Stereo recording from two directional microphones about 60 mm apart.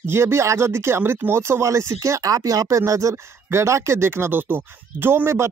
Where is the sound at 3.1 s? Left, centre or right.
Right.